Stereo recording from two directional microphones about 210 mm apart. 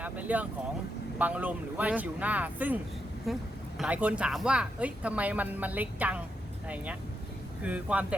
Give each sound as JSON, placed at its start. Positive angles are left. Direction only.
{"t": 0.0, "sound": "speech", "side_deg": -5}
{"t": 7.6, "sound": "speech", "side_deg": -5}